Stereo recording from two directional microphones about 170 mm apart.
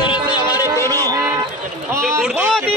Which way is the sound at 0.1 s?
25° left (ahead or behind).